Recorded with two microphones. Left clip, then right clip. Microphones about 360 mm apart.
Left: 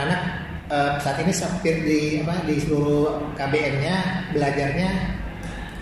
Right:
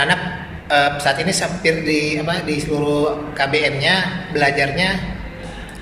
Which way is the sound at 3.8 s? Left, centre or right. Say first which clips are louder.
Right 8 dB; right.